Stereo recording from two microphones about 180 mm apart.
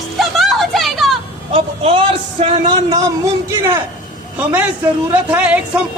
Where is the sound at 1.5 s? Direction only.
30° right (ahead or behind).